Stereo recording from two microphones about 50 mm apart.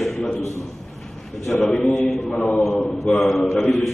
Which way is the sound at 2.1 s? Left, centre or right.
Centre.